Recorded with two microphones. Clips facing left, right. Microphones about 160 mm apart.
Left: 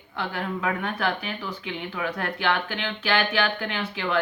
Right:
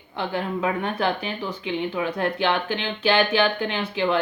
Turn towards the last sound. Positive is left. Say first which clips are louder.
# right 5 dB
turn(degrees=-25)  # may be behind; listen again after turning